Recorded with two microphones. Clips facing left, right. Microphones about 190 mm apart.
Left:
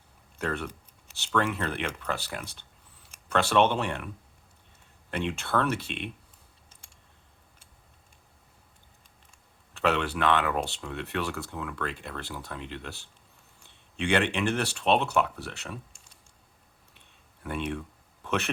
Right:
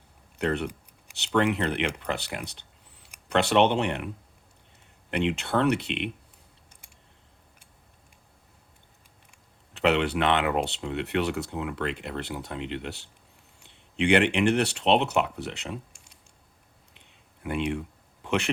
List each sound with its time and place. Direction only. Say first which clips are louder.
0.3 s speech: right 5 dB; 20° right (ahead or behind)
5.1 s speech: right 3 dB; 20° right (ahead or behind)
9.7 s speech: right 3 dB; 20° right (ahead or behind)
17.4 s a sound: right 4 dB; 15° right (ahead or behind)